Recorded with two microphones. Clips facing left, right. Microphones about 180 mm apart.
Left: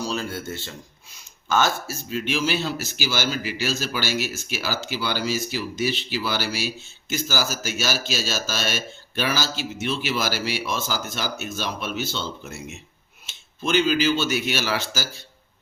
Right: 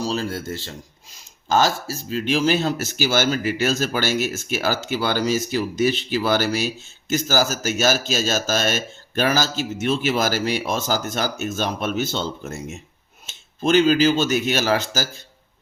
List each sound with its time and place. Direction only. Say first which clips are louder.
0.0 s speech: right 3 dB; 35° right (ahead or behind)